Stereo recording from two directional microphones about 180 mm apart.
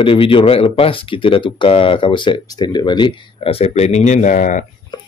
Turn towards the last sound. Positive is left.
turn(degrees=45)  # may be behind; listen again after turning